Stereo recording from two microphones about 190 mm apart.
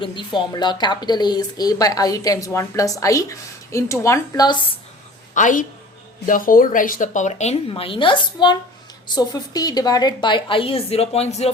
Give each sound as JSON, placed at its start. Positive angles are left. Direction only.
{"t": 0.0, "sound": "a woman's voice", "side_deg": 25}
{"t": 5.3, "sound": "a woman's voice", "side_deg": 40}